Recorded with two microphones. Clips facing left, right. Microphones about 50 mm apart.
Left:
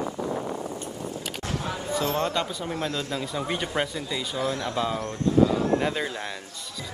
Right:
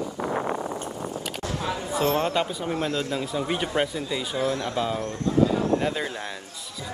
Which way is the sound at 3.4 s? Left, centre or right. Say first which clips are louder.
Right 2 dB; centre.